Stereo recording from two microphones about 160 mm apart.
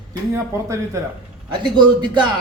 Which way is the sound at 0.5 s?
15° right (ahead or behind).